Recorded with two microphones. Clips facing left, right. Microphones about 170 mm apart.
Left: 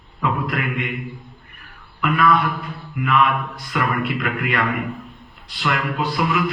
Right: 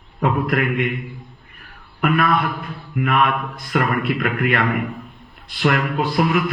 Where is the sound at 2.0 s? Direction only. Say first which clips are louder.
Even; 50° right (ahead or behind).